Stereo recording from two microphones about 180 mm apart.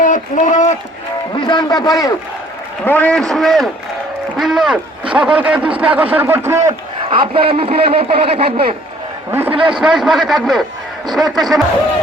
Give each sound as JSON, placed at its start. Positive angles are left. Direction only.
{"t": 0.0, "sound": "speech", "side_deg": 45}
{"t": 1.4, "sound": "a man's voice", "side_deg": 25}
{"t": 2.8, "sound": "a man's voice", "side_deg": 10}
{"t": 6.7, "sound": "a man's voice", "side_deg": -25}
{"t": 9.6, "sound": "a man's voice", "side_deg": -5}